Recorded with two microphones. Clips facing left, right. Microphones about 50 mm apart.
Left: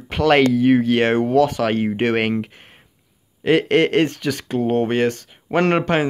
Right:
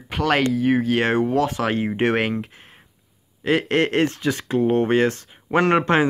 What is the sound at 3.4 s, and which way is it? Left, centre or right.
Speech, centre.